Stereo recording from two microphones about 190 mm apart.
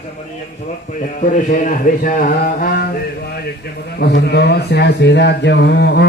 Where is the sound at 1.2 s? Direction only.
40° left (ahead or behind).